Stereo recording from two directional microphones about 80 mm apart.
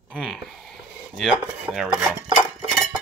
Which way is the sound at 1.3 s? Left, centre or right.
Centre.